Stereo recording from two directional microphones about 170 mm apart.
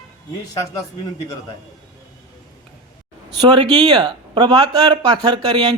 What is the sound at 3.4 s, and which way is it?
Speech, 25° right (ahead or behind).